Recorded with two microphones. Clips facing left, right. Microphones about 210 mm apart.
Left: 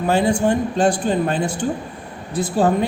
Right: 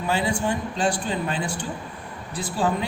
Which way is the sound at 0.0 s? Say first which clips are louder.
Left 7 dB; 45° left (ahead or behind).